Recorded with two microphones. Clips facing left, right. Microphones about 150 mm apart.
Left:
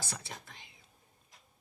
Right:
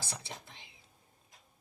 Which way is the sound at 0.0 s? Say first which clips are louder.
Even; 25° right (ahead or behind).